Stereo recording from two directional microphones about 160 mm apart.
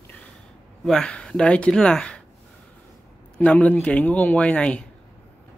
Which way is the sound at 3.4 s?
10° left (ahead or behind).